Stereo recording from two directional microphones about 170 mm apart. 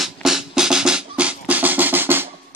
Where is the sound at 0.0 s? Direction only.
Centre (ahead or behind).